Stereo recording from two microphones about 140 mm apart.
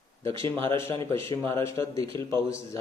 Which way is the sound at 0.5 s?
20° left (ahead or behind).